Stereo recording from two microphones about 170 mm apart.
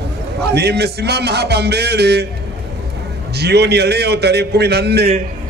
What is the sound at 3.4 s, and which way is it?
A man's voice, 75° right (ahead or behind).